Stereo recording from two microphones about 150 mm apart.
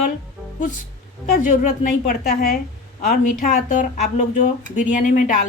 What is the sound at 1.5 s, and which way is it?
A woman's voice, 65° left (ahead or behind).